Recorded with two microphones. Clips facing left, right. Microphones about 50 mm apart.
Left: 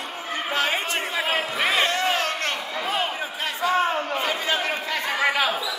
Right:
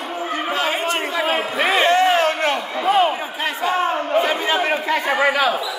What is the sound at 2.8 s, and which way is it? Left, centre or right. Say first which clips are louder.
Speech: right 11 dB; right.